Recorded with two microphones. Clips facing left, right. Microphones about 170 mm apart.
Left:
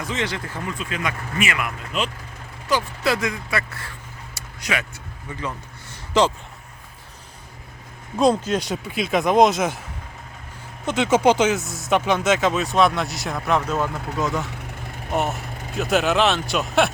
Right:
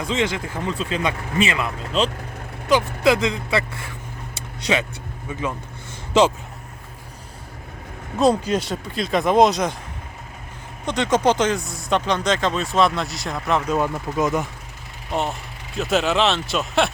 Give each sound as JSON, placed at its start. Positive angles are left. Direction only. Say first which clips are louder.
{"t": 0.2, "sound": "speech", "louder": "right 4 dB", "side_deg": -15}
{"t": 0.7, "sound": "speech", "louder": "right 5 dB", "side_deg": -30}
{"t": 2.6, "sound": "speech", "louder": "right 5 dB", "side_deg": -20}
{"t": 4.6, "sound": "speech", "louder": "right 5 dB", "side_deg": -25}
{"t": 8.2, "sound": "speech", "louder": "right 1 dB", "side_deg": -5}
{"t": 10.8, "sound": "speech", "louder": "left 1 dB", "side_deg": 5}
{"t": 13.7, "sound": "speech", "louder": "right 3 dB", "side_deg": -15}
{"t": 15.1, "sound": "speech", "louder": "left 1 dB", "side_deg": 5}